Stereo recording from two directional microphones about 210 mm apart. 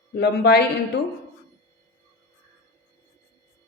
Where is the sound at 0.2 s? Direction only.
50° left (ahead or behind).